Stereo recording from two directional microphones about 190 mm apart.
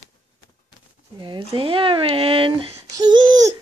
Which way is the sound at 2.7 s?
20° right (ahead or behind).